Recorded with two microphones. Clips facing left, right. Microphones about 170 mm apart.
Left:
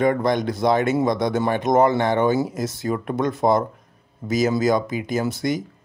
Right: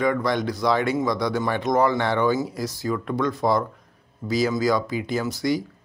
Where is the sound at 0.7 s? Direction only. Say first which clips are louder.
Left 3 dB; 45° left (ahead or behind).